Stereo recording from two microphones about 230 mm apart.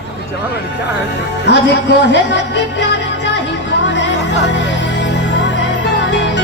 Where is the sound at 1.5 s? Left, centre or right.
Left.